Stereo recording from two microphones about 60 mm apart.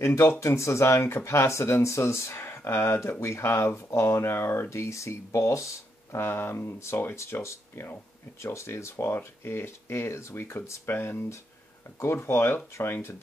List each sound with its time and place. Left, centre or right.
0.0 s speech: left
3.0 s speech: left
6.1 s speech: left